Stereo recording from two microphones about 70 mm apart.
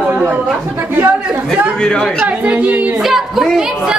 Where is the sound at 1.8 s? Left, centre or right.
Centre.